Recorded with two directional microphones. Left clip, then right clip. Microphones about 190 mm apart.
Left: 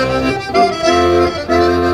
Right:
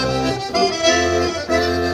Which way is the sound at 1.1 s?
20° left (ahead or behind).